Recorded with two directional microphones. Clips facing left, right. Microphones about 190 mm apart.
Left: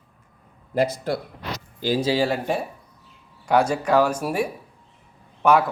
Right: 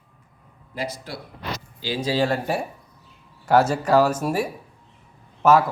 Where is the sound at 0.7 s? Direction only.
50° left (ahead or behind).